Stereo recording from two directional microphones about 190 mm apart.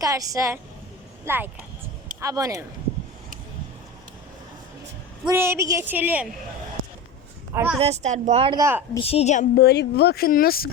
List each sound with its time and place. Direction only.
0.0 s a woman's voice: 20° right (ahead or behind)
5.3 s a woman's voice: 15° right (ahead or behind)
7.5 s a woman's voice: 10° right (ahead or behind)
7.8 s a woman's voice: 35° right (ahead or behind)
8.5 s a woman's voice: 15° right (ahead or behind)
9.0 s a woman's voice: 30° left (ahead or behind)
9.6 s speech: 60° left (ahead or behind)